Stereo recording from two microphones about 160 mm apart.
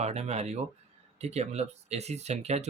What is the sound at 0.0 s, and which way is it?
Speech, 40° right (ahead or behind).